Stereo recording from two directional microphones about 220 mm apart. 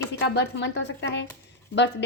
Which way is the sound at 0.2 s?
50° left (ahead or behind).